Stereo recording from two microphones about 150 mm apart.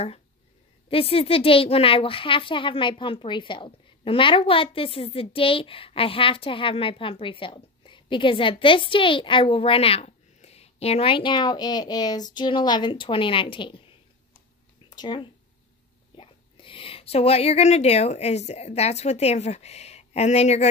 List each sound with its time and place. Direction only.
0.8 s a woman's voice: 40° left (ahead or behind)
15.0 s speech: 30° left (ahead or behind); by 20.6 s 45° left (ahead or behind)